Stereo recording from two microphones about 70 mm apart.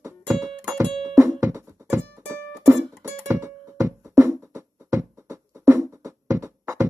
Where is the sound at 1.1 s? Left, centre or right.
Right.